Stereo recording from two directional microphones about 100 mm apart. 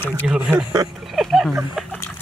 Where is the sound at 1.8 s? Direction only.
5° right (ahead or behind).